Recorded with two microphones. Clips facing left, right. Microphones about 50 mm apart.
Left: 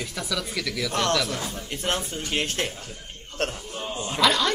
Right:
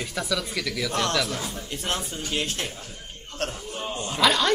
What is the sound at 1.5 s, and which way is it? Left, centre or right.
Speech, left.